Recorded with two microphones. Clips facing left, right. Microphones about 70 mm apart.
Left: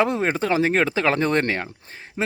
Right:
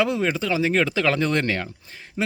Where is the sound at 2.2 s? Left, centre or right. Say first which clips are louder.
Even; left.